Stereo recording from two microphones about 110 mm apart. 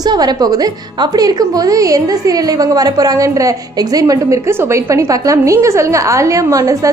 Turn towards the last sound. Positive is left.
turn(degrees=-30)  # may be behind; listen again after turning